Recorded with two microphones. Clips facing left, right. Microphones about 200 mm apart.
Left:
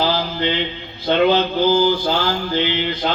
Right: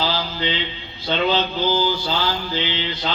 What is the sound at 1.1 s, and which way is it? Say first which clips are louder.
Speech: left 5 dB; 55° left (ahead or behind).